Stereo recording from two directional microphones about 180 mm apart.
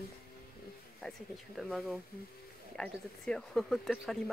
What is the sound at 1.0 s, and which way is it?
Speech, centre (ahead or behind).